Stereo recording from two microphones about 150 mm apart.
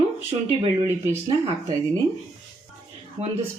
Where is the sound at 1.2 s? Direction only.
30° right (ahead or behind).